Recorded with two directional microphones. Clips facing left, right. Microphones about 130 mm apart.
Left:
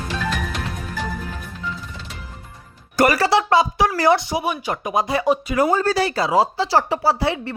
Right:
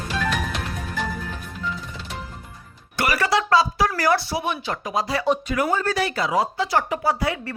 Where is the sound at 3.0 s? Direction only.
40° left (ahead or behind).